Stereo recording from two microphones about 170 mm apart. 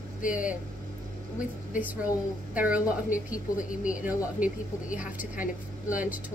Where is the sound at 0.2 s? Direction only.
50° left (ahead or behind).